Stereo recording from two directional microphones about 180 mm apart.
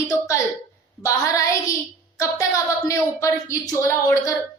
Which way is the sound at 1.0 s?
20° left (ahead or behind).